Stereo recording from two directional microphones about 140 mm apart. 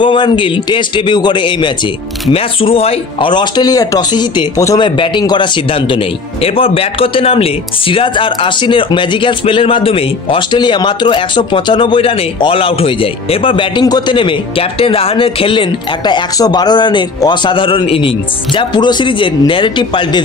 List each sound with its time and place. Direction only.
0.0 s speech: 35° left (ahead or behind)
4.7 s speech: 35° left (ahead or behind)